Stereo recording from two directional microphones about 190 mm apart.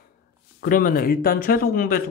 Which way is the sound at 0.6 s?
45° left (ahead or behind).